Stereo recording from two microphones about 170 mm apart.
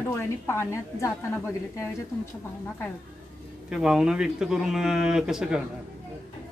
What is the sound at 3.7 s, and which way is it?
Speech, 5° right (ahead or behind).